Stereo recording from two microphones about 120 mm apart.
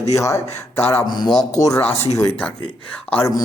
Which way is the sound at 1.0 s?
35° left (ahead or behind).